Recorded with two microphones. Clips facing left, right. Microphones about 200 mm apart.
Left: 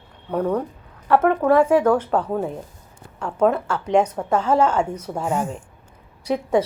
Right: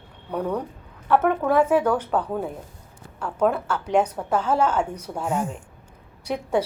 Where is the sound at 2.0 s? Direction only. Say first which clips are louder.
Left 3 dB; 5° right (ahead or behind).